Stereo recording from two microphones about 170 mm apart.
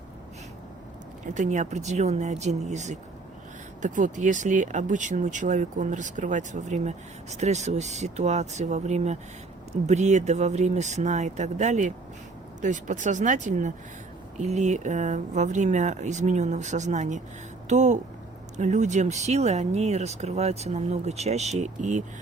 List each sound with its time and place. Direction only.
1.3 s speech: 45° right (ahead or behind)